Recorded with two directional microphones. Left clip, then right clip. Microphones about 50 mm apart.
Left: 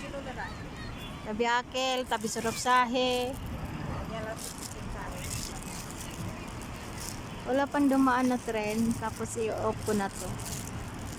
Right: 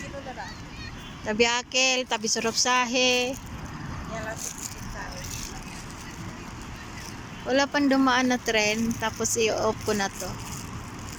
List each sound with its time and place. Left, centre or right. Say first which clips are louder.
1.3 s speech: right 5 dB; centre
2.2 s speech: right 5 dB; centre
7.4 s speech: right 4 dB; centre